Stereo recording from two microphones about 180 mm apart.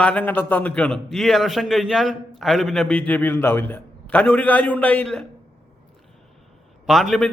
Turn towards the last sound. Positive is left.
turn(degrees=0)  # may be behind; listen again after turning